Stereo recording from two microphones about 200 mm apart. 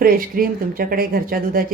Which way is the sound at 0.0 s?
45° right (ahead or behind).